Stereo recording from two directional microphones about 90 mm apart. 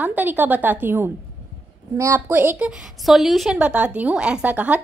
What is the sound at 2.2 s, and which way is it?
Speech, 20° right (ahead or behind).